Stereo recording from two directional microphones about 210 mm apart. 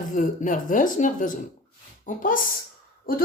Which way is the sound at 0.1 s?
40° left (ahead or behind).